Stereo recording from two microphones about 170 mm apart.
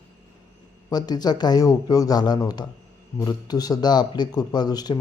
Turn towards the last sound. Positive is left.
turn(degrees=25)  # may be behind; listen again after turning